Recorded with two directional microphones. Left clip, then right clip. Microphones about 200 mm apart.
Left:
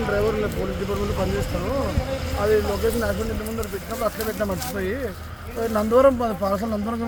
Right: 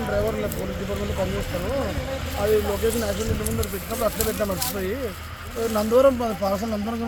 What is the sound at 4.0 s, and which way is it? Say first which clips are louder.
Speech: right 1 dB; 30° right (ahead or behind).